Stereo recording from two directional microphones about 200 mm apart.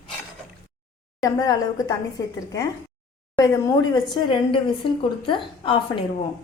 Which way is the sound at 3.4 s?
15° left (ahead or behind).